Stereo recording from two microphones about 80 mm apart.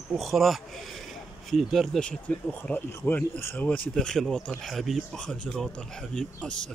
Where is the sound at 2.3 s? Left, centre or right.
Centre.